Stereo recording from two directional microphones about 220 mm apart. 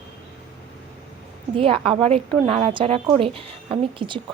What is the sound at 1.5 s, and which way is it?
A woman's voice, 25° right (ahead or behind).